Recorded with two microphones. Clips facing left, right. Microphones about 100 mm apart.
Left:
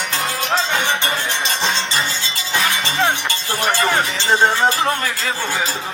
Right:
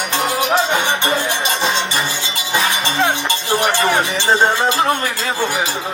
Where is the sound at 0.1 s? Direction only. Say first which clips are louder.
Right 5 dB; 15° right (ahead or behind).